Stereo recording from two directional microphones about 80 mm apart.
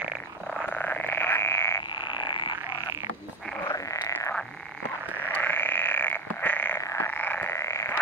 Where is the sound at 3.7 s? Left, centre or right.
Left.